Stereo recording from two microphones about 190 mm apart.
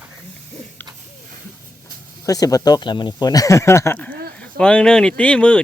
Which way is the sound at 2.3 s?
20° left (ahead or behind).